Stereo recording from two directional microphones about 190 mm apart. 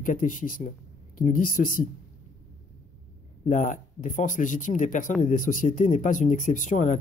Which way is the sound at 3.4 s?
40° left (ahead or behind).